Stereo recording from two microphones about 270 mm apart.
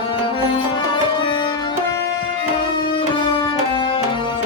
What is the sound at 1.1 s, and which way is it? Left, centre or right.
Music, centre.